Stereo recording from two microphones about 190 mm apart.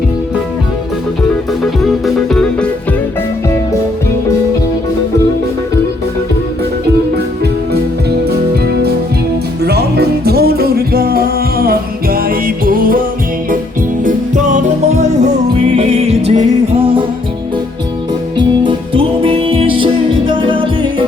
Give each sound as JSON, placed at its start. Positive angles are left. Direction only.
{"t": 2.0, "sound": "music", "side_deg": 5}
{"t": 8.3, "sound": "music", "side_deg": -55}
{"t": 14.0, "sound": "music", "side_deg": -40}
{"t": 18.3, "sound": "music", "side_deg": -25}